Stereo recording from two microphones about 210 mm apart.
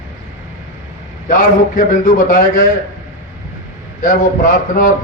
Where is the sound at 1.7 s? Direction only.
40° left (ahead or behind).